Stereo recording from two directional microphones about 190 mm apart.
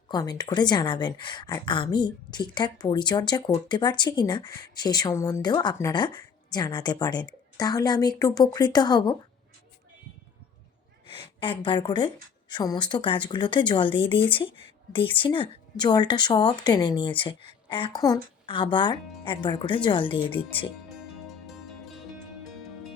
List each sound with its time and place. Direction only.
0.1 s a woman's voice: 20° left (ahead or behind)
11.3 s a woman's voice: 25° left (ahead or behind)
20.9 s music: centre (ahead or behind)